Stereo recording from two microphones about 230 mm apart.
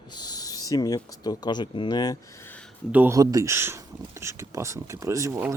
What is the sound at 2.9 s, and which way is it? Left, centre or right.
Speech, centre.